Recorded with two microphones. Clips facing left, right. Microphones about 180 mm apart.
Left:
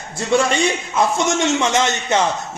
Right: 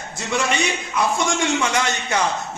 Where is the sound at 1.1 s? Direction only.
20° left (ahead or behind).